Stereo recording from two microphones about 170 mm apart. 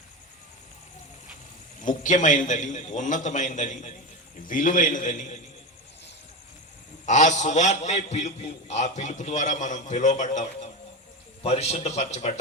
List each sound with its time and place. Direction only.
1.8 s a man's voice: 50° left (ahead or behind)
7.0 s a man's voice: 45° left (ahead or behind)